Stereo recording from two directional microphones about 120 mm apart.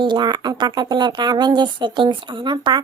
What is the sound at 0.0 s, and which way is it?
Speech, 40° right (ahead or behind).